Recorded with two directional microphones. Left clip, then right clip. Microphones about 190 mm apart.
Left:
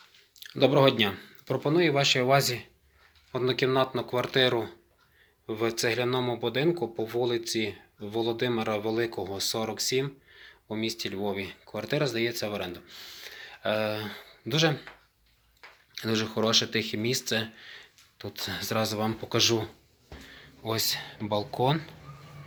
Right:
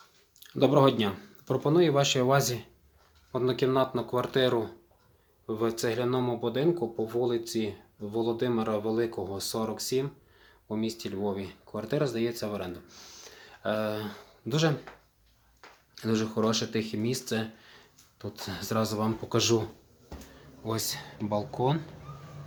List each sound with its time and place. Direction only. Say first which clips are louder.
0.3 s speech: left 1 dB; 10° right (ahead or behind)
16.0 s speech: left 1 dB; 5° left (ahead or behind)
20.7 s speech: left 4 dB; 5° left (ahead or behind)